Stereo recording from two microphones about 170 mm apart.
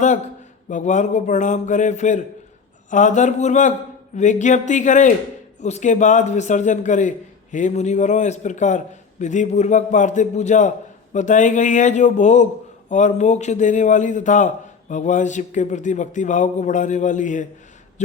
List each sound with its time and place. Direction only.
0.7 s a man's voice: 45° left (ahead or behind)